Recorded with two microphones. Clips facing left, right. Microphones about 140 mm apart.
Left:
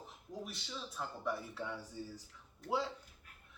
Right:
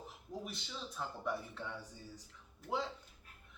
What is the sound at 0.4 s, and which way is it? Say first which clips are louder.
A man's voice: even; centre (ahead or behind).